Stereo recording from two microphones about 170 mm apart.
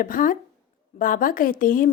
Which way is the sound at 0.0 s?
55° left (ahead or behind).